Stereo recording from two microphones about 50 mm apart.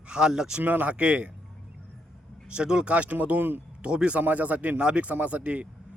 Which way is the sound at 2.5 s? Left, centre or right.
Centre.